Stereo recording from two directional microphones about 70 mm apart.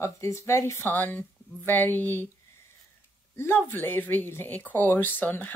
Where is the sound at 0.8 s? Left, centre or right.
Left.